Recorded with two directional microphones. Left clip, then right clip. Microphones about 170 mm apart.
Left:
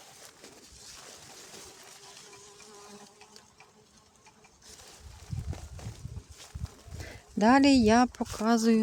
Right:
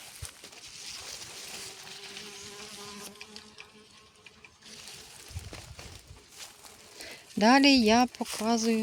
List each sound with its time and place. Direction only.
7.0 s speech: 10° left (ahead or behind)
8.4 s speech: 30° left (ahead or behind)